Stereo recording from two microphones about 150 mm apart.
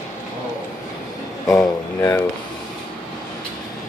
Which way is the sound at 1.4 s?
20° left (ahead or behind).